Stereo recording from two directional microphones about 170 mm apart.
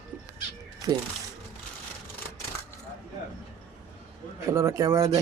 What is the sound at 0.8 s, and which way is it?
Speech, 20° right (ahead or behind).